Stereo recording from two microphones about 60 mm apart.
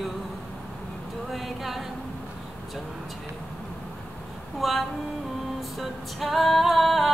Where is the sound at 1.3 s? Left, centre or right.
Centre.